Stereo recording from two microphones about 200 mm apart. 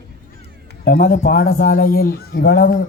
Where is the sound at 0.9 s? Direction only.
45° left (ahead or behind).